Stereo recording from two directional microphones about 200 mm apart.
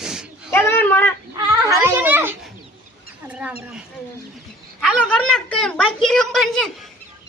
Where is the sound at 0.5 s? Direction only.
10° left (ahead or behind).